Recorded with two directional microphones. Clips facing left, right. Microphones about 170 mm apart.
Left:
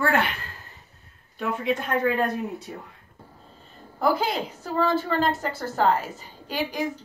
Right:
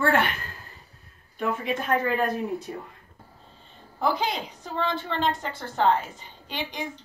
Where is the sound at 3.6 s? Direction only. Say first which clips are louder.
Left 2 dB; 5° left (ahead or behind).